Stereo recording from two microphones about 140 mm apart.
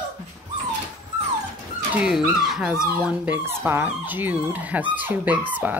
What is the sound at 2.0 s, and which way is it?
Speech, 5° right (ahead or behind).